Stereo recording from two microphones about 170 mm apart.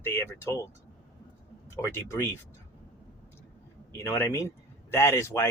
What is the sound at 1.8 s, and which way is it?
Speech, 15° left (ahead or behind).